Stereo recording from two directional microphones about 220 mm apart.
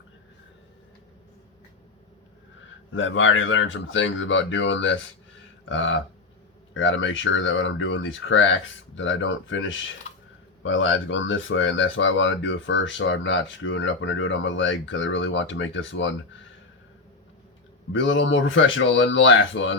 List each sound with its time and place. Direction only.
2.9 s speech: 60° left (ahead or behind)
17.9 s speech: 60° left (ahead or behind)